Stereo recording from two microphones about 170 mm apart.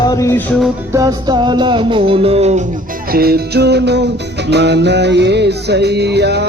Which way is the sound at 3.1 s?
65° right (ahead or behind).